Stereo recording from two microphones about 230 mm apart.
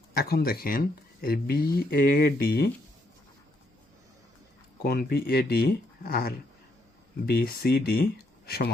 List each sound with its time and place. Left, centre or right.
0.1 s speech: left
4.8 s speech: left